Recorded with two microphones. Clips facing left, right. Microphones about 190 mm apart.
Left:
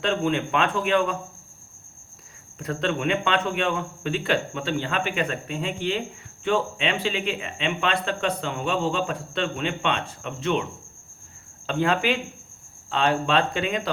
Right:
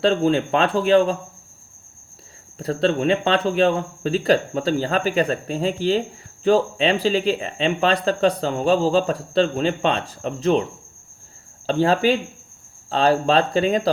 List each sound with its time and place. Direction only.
0.0 s speech: 35° right (ahead or behind)
2.6 s speech: 35° right (ahead or behind)